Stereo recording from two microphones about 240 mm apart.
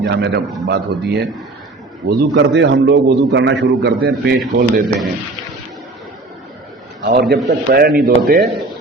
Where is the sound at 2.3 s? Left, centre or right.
Right.